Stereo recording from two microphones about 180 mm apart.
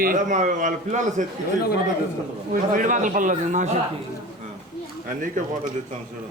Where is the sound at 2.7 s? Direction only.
45° right (ahead or behind).